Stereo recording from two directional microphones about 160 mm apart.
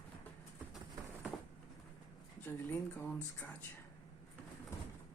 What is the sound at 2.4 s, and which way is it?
Speech, 15° left (ahead or behind).